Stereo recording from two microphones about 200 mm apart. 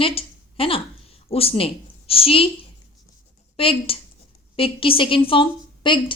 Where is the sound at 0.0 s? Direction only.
30° left (ahead or behind).